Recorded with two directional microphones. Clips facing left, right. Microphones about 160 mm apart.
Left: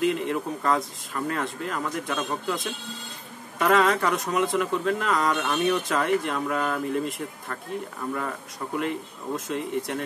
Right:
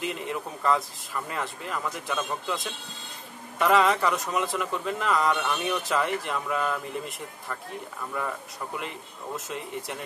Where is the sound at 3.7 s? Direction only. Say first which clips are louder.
Left 1 dB; centre (ahead or behind).